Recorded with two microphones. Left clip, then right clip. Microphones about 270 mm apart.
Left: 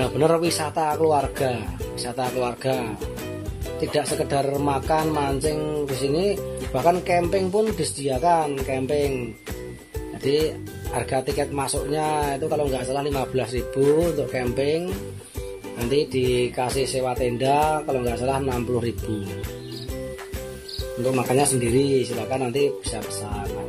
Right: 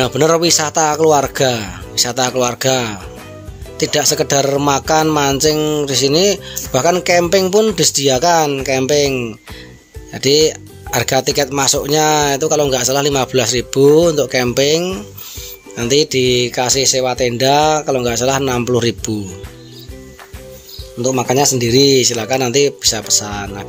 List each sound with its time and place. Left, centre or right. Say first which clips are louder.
0.0 s speech: right 7 dB; right
10.2 s speech: right 10 dB; right
15.9 s speech: right 9 dB; right
21.1 s speech: right 7 dB; right